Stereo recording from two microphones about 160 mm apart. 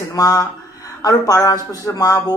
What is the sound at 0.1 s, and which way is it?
Speech, 20° left (ahead or behind).